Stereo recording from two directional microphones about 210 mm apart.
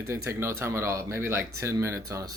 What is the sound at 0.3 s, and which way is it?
Speech, 15° right (ahead or behind).